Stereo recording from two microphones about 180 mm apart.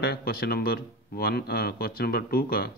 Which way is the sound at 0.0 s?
60° left (ahead or behind).